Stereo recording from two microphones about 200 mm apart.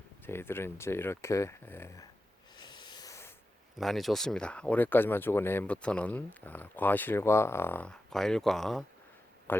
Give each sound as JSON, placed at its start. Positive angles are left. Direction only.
{"t": 0.3, "sound": "speech", "side_deg": 10}
{"t": 2.6, "sound": "a sound", "side_deg": 20}
{"t": 3.8, "sound": "speech", "side_deg": 0}